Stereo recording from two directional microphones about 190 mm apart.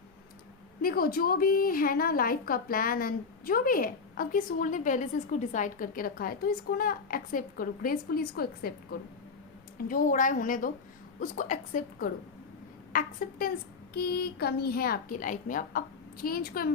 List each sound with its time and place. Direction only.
0.8 s a woman's voice: 50° left (ahead or behind)